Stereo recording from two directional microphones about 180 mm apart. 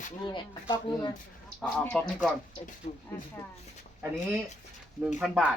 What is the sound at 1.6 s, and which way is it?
Livestock, 5° left (ahead or behind).